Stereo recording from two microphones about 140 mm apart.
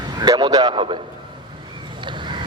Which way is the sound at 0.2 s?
30° right (ahead or behind).